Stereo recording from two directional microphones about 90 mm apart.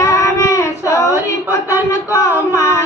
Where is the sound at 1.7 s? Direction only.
35° left (ahead or behind).